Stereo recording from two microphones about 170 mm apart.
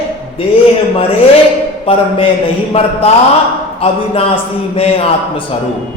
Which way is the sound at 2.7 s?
35° left (ahead or behind).